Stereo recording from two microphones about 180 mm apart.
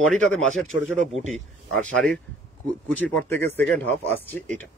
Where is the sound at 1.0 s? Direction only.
40° right (ahead or behind).